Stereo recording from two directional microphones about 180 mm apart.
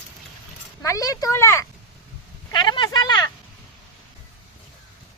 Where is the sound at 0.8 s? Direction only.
20° left (ahead or behind).